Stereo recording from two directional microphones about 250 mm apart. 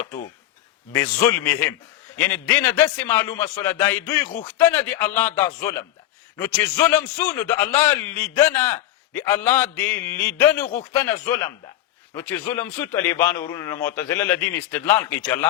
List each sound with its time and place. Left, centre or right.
0.9 s a man's voice: centre